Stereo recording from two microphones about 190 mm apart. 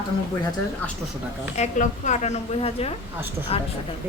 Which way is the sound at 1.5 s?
40° left (ahead or behind).